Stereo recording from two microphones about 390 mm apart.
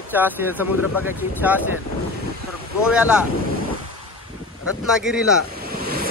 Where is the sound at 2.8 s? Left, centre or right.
Centre.